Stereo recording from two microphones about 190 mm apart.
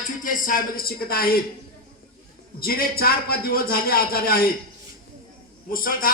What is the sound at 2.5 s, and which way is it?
Speech, 50° left (ahead or behind).